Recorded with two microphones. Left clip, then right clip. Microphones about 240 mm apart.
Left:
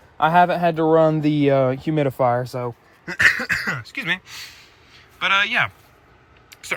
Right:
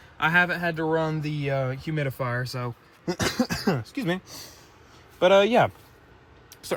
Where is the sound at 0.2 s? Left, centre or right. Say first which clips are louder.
Left 6 dB; centre.